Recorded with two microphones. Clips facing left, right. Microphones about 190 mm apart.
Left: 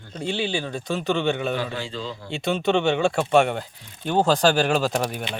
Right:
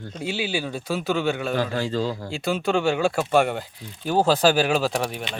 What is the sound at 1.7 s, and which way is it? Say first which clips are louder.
Speech: right 6 dB; 40° right (ahead or behind).